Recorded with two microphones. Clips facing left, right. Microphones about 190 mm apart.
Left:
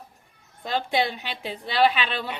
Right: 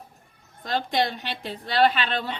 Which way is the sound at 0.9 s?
10° left (ahead or behind).